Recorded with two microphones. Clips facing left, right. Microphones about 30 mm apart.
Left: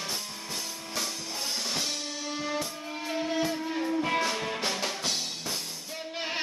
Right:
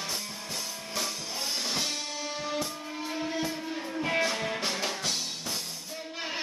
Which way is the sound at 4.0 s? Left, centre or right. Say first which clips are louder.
Right 4 dB; centre.